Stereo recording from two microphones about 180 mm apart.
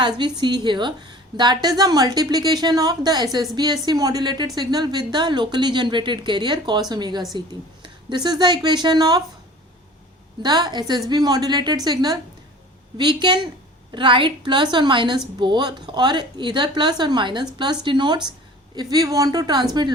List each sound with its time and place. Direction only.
0.2 s a woman's voice: 25° right (ahead or behind)
10.4 s a woman's voice: 25° right (ahead or behind)